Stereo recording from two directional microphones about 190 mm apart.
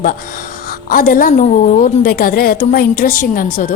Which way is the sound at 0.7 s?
50° left (ahead or behind).